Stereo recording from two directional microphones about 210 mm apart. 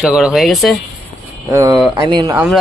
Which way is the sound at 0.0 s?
Centre (ahead or behind).